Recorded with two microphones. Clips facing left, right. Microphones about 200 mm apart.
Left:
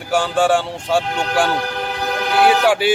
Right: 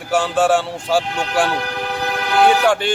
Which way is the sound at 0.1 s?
Centre (ahead or behind).